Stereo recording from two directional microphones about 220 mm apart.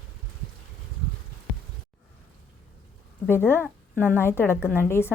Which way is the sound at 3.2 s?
10° left (ahead or behind).